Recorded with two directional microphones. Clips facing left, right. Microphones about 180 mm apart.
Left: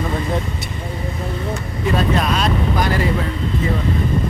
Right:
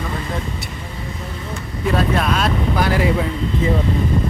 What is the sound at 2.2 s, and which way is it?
Speech, centre (ahead or behind).